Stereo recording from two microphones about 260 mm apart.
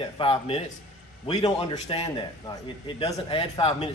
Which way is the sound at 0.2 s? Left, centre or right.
Left.